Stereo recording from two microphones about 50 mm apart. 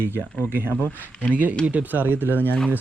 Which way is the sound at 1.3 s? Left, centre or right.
Right.